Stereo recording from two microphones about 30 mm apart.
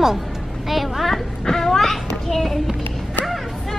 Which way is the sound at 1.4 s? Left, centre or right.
Centre.